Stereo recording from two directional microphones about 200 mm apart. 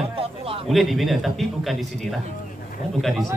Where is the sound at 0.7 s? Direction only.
Centre (ahead or behind).